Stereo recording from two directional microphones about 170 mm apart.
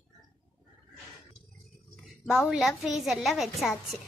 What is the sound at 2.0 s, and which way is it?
A woman's voice, centre (ahead or behind).